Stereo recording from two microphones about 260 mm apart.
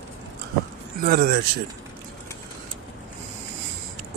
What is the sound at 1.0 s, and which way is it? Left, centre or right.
Speech, right.